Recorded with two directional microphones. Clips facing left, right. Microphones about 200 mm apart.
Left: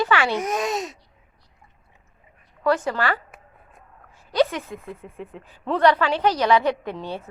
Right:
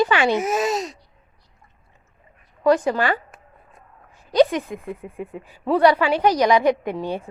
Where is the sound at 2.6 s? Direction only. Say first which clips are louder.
Right 4 dB; 15° right (ahead or behind).